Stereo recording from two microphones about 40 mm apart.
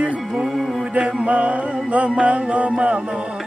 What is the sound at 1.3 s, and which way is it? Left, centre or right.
Music, right.